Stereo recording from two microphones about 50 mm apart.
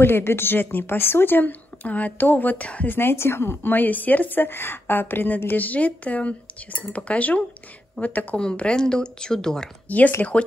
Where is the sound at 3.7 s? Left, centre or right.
Left.